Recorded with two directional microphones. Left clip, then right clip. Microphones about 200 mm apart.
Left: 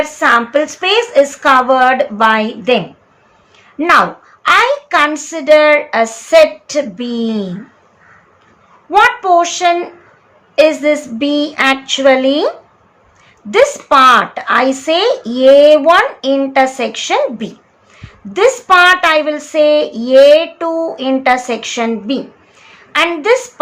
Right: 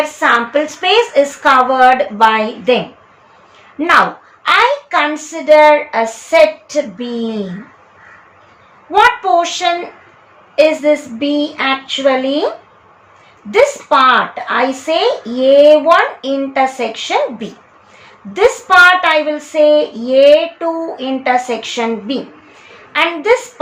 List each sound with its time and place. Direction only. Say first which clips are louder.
0.2 s speech: left 2 dB; 20° left (ahead or behind)
3.8 s speech: left 1 dB; 20° left (ahead or behind)
8.9 s speech: left 1 dB; 20° left (ahead or behind)
13.5 s a woman's voice: left 1 dB; 25° left (ahead or behind)